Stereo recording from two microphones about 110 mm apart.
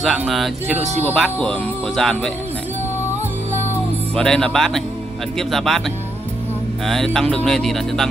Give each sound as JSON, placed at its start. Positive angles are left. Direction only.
{"t": 1.0, "sound": "speech", "side_deg": 10}
{"t": 4.1, "sound": "music", "side_deg": 5}
{"t": 6.9, "sound": "music", "side_deg": 5}